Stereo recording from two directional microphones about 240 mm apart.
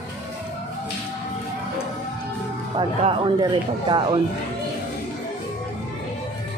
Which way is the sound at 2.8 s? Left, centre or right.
Centre.